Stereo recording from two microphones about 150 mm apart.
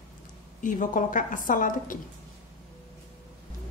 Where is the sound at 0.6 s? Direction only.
60° left (ahead or behind).